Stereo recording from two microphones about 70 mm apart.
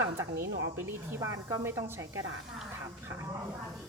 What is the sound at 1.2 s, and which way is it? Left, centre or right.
Speech, right.